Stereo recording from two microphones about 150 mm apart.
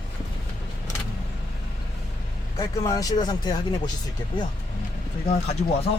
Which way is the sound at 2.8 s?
25° left (ahead or behind).